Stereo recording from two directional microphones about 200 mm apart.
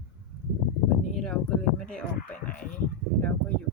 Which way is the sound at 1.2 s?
5° left (ahead or behind).